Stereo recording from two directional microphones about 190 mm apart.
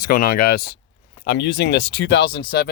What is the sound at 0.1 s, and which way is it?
Speech, 50° left (ahead or behind).